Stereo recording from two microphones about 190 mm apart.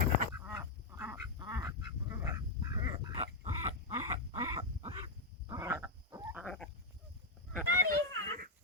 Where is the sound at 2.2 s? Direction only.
20° right (ahead or behind).